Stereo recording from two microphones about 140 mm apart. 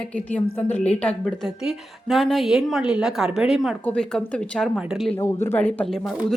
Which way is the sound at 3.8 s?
5° left (ahead or behind).